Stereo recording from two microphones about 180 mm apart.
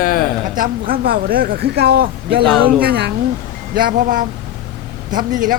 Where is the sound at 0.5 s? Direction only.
50° right (ahead or behind).